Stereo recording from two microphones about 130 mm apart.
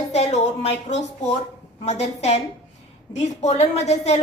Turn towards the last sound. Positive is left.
turn(degrees=60)  # may be behind; listen again after turning